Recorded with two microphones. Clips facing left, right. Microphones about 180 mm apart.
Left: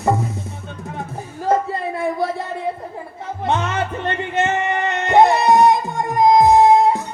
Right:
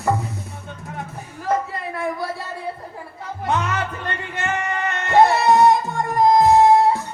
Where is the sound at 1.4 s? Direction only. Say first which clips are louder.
Left 4 dB; 30° left (ahead or behind).